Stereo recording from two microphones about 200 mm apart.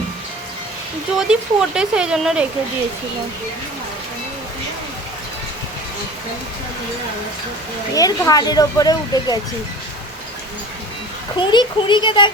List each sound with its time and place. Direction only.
1.3 s speech: 5° right (ahead or behind)
7.9 s speech: 20° left (ahead or behind)
11.3 s speech: 25° left (ahead or behind)